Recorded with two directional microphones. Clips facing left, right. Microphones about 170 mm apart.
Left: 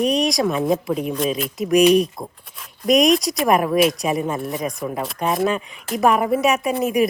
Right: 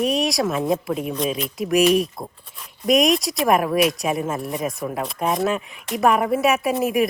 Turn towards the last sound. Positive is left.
turn(degrees=0)  # may be behind; listen again after turning